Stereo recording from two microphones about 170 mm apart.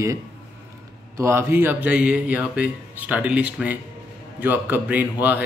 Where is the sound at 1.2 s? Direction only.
15° right (ahead or behind).